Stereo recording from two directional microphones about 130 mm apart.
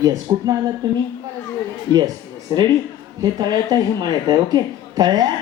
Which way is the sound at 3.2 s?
30° right (ahead or behind).